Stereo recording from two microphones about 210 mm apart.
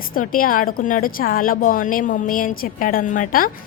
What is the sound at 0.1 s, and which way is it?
A woman's voice, 40° left (ahead or behind).